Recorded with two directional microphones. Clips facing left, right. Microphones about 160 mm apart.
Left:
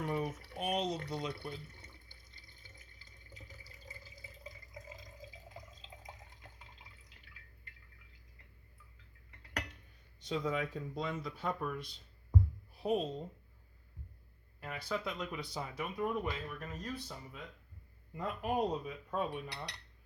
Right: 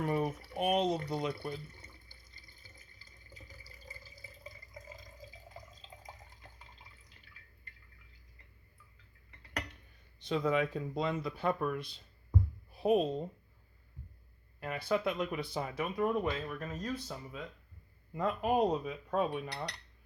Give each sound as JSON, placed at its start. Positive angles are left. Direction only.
{"t": 0.0, "sound": "speech", "side_deg": -60}
{"t": 0.9, "sound": "speech", "side_deg": -5}
{"t": 1.5, "sound": "water", "side_deg": -10}
{"t": 3.3, "sound": "water", "side_deg": -10}
{"t": 5.5, "sound": "drip", "side_deg": 0}
{"t": 10.2, "sound": "a woman's voice", "side_deg": -60}
{"t": 14.6, "sound": "speech", "side_deg": -60}